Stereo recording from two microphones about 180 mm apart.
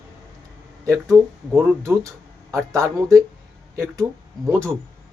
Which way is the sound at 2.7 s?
20° right (ahead or behind).